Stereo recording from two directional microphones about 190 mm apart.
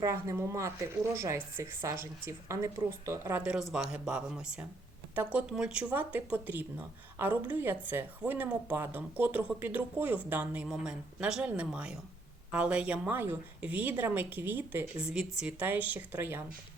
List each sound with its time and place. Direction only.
0.0 s a woman's voice: 15° right (ahead or behind)